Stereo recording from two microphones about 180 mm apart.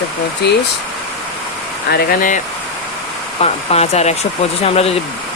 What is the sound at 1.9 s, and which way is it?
Speech, 50° left (ahead or behind).